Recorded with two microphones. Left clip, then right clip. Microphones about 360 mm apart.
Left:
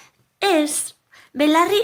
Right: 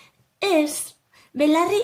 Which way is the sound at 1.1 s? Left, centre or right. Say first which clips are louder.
Left 3 dB; centre.